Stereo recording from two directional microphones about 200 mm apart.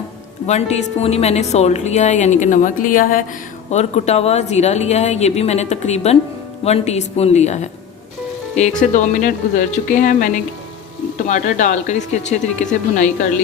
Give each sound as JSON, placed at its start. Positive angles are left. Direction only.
{"t": 0.4, "sound": "a woman's voice", "side_deg": 35}